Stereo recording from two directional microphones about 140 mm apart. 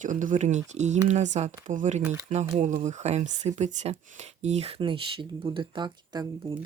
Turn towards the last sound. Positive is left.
turn(degrees=-30)  # may be behind; listen again after turning